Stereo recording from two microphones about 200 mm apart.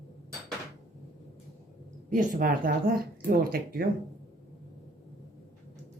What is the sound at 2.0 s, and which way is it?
Speech, 45° right (ahead or behind).